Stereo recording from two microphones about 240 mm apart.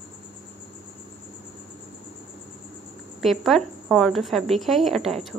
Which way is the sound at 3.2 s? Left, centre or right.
Centre.